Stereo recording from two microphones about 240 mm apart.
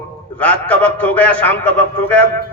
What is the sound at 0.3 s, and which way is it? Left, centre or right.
A man's voice, centre.